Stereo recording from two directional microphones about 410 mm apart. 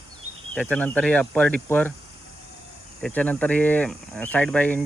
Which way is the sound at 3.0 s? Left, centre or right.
Centre.